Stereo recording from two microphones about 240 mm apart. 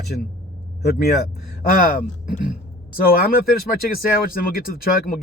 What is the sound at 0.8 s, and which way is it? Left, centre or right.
Speech, left.